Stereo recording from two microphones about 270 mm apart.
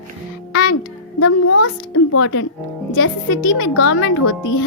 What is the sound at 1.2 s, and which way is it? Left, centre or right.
A child's voice, left.